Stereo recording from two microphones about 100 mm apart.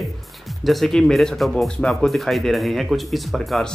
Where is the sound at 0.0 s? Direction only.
Centre (ahead or behind).